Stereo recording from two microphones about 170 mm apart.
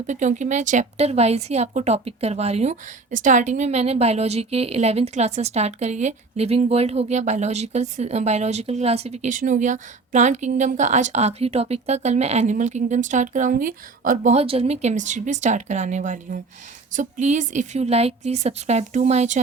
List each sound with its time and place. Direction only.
0.1 s a woman's voice: 45° right (ahead or behind)
14.3 s a woman's voice: 35° right (ahead or behind)